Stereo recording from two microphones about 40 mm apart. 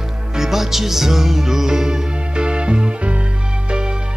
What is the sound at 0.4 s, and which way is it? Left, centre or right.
Music, centre.